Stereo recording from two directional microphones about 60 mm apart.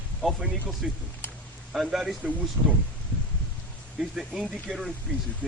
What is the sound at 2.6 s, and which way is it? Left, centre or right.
Speech, right.